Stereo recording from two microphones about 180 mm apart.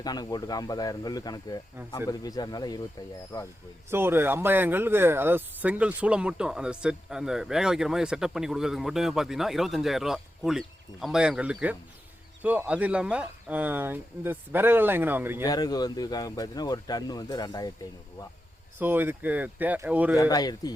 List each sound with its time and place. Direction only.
0.0 s speech: 20° left (ahead or behind)
3.8 s speech: 10° right (ahead or behind)
15.4 s speech: 20° left (ahead or behind)
18.8 s speech: 10° right (ahead or behind)
20.1 s speech: 20° left (ahead or behind)